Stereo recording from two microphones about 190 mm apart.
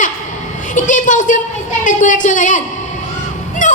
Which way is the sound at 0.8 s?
40° left (ahead or behind).